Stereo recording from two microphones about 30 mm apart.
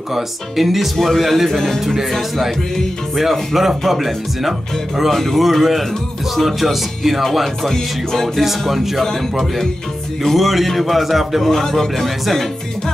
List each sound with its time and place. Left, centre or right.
0.1 s speech: centre
3.2 s speech: centre
5.1 s speech: centre
7.7 s speech: centre
8.4 s speech: centre
9.0 s speech: centre
10.3 s speech: centre
11.5 s speech: centre